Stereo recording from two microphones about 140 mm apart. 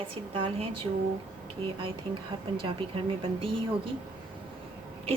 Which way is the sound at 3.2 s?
40° right (ahead or behind).